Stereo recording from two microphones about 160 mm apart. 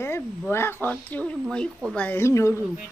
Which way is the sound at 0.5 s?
15° left (ahead or behind).